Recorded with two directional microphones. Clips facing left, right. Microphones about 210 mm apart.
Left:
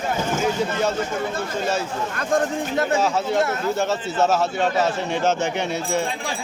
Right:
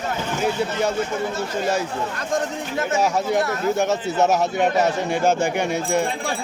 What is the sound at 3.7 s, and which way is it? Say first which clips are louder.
A man's voice: right 2 dB; 15° right (ahead or behind).